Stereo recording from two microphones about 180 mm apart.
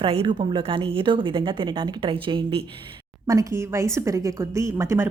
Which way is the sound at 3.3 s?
15° right (ahead or behind).